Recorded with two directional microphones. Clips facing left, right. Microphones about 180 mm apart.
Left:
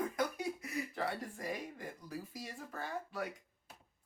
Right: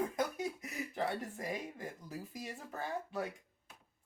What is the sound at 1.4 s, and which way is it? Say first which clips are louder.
Speech: right 1 dB; 20° right (ahead or behind).